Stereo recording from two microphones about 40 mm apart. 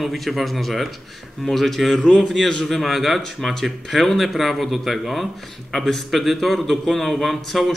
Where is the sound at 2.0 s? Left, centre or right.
Centre.